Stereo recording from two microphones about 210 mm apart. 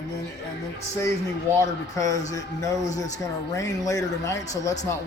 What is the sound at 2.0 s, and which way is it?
A man's voice, 15° left (ahead or behind).